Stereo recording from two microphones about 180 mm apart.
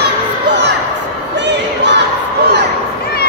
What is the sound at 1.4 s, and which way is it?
Crowd, 75° right (ahead or behind).